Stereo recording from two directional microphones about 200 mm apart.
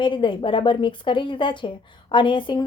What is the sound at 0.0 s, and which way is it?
A woman's voice, 25° left (ahead or behind).